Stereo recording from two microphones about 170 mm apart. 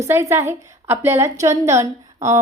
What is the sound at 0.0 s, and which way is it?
A woman's voice, 15° right (ahead or behind).